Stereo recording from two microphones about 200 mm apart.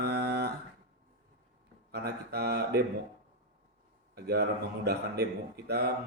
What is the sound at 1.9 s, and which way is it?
Mantra, 50° right (ahead or behind).